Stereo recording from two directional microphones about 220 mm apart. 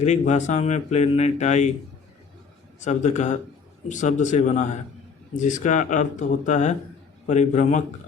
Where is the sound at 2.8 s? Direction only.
35° left (ahead or behind).